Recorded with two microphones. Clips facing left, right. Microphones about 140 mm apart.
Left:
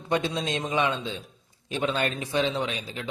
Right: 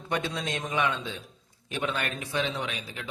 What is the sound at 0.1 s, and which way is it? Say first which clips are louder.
A man's voice: left 4 dB; 25° left (ahead or behind).